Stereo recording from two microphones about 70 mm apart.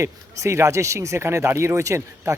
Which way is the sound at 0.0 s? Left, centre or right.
Right.